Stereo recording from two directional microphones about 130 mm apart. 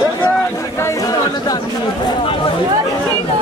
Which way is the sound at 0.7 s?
25° left (ahead or behind).